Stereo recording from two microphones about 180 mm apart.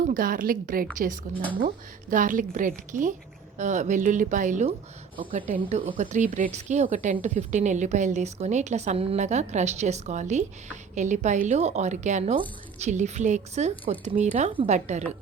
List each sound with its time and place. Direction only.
0.0 s a woman's voice: 50° right (ahead or behind)